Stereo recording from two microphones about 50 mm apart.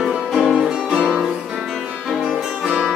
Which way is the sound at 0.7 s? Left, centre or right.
Centre.